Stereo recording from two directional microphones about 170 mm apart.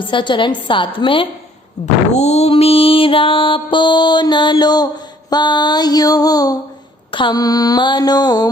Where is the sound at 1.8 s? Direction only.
40° left (ahead or behind).